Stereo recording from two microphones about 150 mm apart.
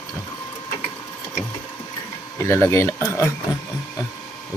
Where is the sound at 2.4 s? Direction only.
15° left (ahead or behind).